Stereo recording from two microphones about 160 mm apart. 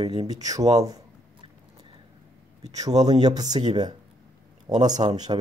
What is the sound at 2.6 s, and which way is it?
Speech, 25° right (ahead or behind).